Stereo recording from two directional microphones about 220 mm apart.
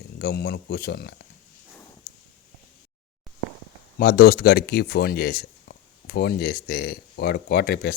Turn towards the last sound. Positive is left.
turn(degrees=45)  # may be behind; listen again after turning